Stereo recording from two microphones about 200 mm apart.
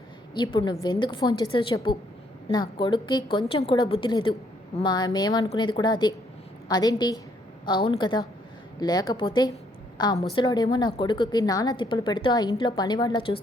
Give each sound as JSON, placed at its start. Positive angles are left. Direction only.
{"t": 0.3, "sound": "a woman's voice", "side_deg": 20}